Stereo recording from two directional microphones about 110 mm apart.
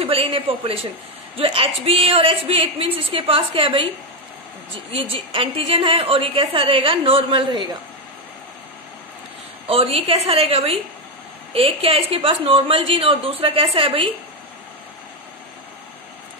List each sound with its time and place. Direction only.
0.0 s a woman's voice: 60° right (ahead or behind)
5.1 s a woman's voice: 55° right (ahead or behind)
9.7 s a woman's voice: 60° right (ahead or behind)